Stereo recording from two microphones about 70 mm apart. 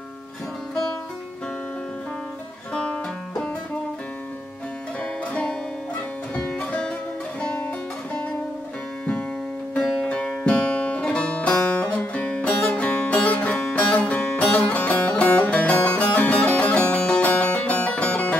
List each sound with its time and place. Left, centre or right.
2.7 s music: centre
5.3 s music: centre
9.8 s music: centre
10.0 s music: centre